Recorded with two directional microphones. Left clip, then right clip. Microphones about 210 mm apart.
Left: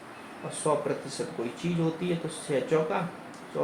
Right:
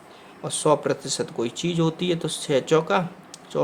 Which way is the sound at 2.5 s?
40° right (ahead or behind).